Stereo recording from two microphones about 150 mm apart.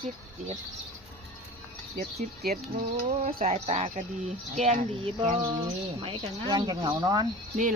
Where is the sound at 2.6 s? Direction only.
45° right (ahead or behind).